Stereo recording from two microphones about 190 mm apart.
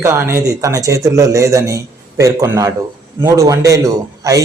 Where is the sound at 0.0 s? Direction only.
15° right (ahead or behind).